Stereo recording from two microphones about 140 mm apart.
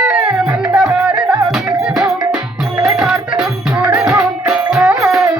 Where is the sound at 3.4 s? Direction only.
10° right (ahead or behind).